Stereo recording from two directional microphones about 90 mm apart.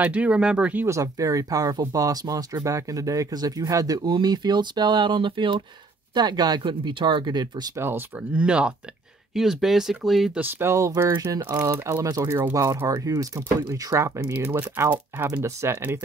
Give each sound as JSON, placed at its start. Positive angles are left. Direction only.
{"t": 0.0, "sound": "speech", "side_deg": -15}
{"t": 0.8, "sound": "speech", "side_deg": -35}
{"t": 6.1, "sound": "speech", "side_deg": -50}
{"t": 7.7, "sound": "speech", "side_deg": -25}
{"t": 8.3, "sound": "speech", "side_deg": -15}
{"t": 10.3, "sound": "speech", "side_deg": -20}
{"t": 12.8, "sound": "speech", "side_deg": -40}
{"t": 14.3, "sound": "speech", "side_deg": -25}